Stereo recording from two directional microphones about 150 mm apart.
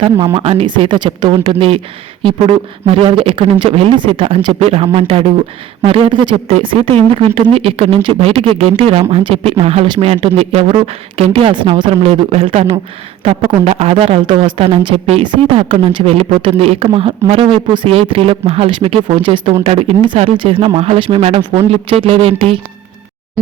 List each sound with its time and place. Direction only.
0.3 s speech: 35° right (ahead or behind)